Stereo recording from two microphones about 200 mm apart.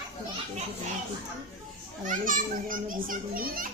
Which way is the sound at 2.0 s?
40° right (ahead or behind).